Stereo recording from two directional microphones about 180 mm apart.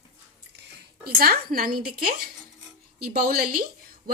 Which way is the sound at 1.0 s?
55° right (ahead or behind).